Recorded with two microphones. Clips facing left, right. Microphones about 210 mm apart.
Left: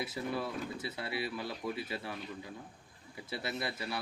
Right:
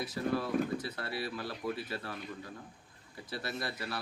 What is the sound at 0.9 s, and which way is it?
Speech, 10° left (ahead or behind).